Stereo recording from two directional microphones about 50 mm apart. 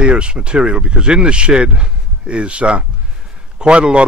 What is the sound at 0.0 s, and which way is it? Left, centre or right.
Speech, centre.